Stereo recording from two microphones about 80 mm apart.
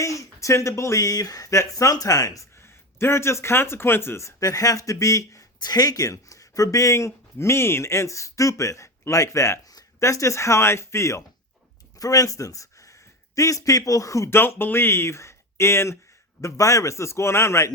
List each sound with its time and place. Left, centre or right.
0.0 s a sound: left
0.8 s speech: left
3.0 s speech: left
5.5 s speech: left
11.9 s speech: left
14.3 s speech: left